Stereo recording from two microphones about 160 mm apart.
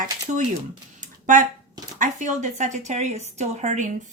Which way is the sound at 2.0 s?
50° right (ahead or behind).